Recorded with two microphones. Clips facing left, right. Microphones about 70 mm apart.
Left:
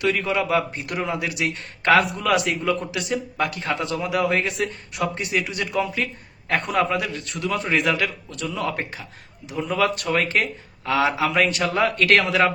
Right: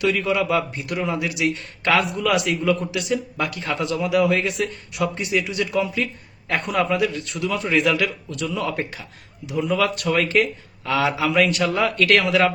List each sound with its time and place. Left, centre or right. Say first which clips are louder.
0.0 s speech: right 2 dB; left